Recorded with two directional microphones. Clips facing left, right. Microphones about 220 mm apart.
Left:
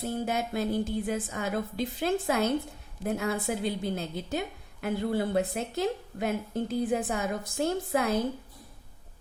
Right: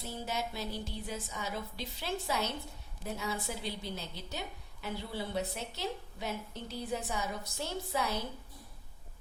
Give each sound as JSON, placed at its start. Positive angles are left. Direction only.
{"t": 0.0, "sound": "a woman's voice", "side_deg": 55}